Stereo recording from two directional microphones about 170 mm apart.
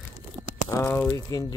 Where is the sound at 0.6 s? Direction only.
15° left (ahead or behind).